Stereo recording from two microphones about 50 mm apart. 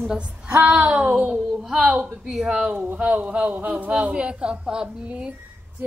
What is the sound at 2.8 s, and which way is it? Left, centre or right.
Speech, right.